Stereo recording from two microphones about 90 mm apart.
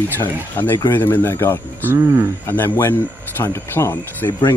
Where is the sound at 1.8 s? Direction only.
25° right (ahead or behind).